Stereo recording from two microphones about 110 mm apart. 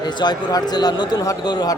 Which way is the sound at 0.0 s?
40° left (ahead or behind).